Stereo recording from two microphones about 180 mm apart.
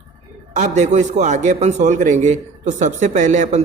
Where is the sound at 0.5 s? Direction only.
40° right (ahead or behind).